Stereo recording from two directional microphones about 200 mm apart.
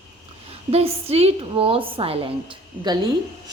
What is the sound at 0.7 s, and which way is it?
Speech, 30° right (ahead or behind).